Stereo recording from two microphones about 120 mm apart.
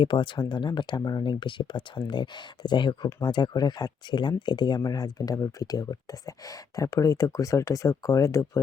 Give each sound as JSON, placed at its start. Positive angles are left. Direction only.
{"t": 0.0, "sound": "speech", "side_deg": 40}